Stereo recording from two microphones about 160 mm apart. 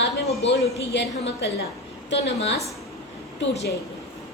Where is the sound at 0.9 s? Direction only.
90° left.